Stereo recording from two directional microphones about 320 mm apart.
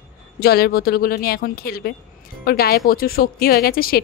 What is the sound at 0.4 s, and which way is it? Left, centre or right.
Speech, left.